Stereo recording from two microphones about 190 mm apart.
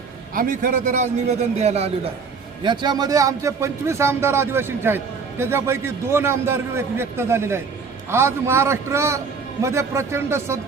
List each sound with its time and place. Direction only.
0.3 s a man's voice: 45° right (ahead or behind)
2.6 s speech: 20° right (ahead or behind)